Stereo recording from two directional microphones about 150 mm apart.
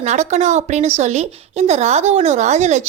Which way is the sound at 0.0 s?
50° right (ahead or behind).